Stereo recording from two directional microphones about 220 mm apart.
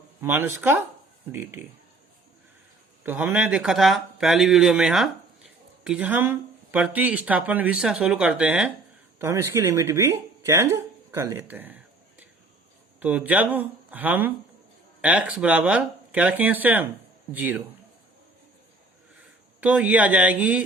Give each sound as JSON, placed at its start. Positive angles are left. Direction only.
{"t": 0.2, "sound": "speech", "side_deg": -10}
{"t": 3.0, "sound": "speech", "side_deg": -10}
{"t": 13.0, "sound": "speech", "side_deg": -5}
{"t": 19.6, "sound": "speech", "side_deg": -5}